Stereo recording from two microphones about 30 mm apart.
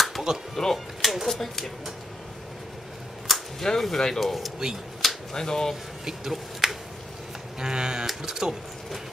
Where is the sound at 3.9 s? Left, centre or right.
Centre.